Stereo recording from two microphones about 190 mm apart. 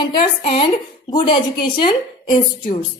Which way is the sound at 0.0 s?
30° left (ahead or behind).